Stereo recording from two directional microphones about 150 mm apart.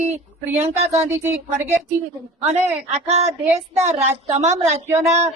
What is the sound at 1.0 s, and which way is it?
Speech, 15° right (ahead or behind).